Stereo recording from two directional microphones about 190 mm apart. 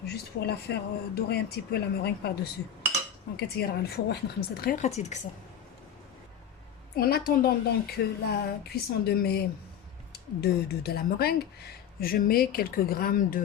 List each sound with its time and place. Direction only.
0.0 s speech: 60° left (ahead or behind); by 5.2 s 35° left (ahead or behind)
6.9 s speech: 50° left (ahead or behind)